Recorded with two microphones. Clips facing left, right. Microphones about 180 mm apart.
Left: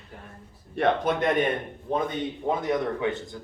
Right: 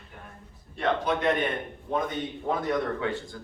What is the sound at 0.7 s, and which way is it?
Speech, 60° left (ahead or behind).